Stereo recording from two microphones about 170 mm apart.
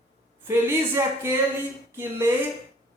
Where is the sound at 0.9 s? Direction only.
15° right (ahead or behind).